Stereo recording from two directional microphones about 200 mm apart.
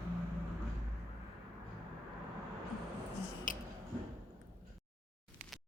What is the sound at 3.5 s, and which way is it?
Tick-tock, 45° left (ahead or behind).